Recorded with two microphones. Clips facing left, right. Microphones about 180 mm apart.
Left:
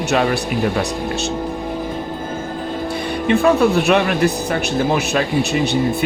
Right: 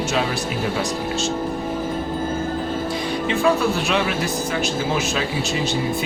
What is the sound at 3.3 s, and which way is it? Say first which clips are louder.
Speech: left 6 dB; 60° left (ahead or behind).